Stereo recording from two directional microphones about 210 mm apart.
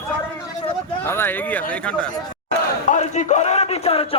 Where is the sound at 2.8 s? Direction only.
35° left (ahead or behind).